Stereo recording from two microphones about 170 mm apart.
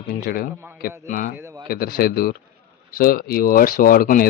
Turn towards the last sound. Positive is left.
turn(degrees=60)  # may be behind; listen again after turning